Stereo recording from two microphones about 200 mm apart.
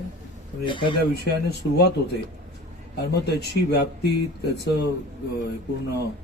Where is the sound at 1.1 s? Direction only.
55° left (ahead or behind).